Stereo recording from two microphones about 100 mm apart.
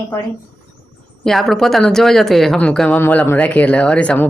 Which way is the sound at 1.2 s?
5° left (ahead or behind).